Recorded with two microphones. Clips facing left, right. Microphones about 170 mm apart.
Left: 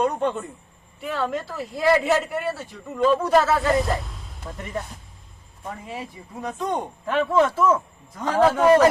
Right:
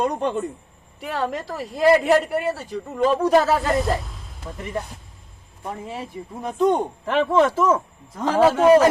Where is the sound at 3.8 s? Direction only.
Centre (ahead or behind).